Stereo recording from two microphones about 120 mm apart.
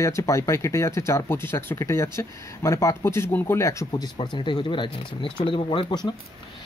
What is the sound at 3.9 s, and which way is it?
Speech, 35° left (ahead or behind).